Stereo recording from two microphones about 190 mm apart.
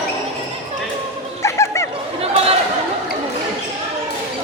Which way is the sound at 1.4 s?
15° left (ahead or behind).